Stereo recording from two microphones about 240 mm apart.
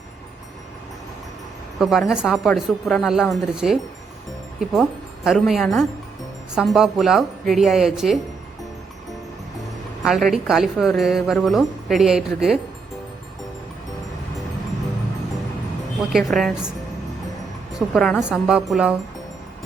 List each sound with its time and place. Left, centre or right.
1.8 s a woman's voice: centre
10.0 s a woman's voice: centre
16.1 s a woman's voice: centre
17.7 s a woman's voice: centre